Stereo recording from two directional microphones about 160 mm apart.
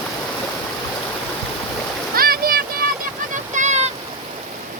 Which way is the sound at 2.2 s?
65° right (ahead or behind).